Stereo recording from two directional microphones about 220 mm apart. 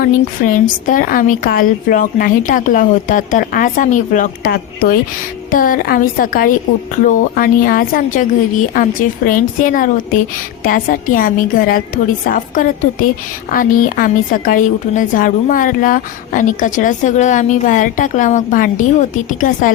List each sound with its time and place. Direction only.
0.0 s a woman's voice: 40° left (ahead or behind)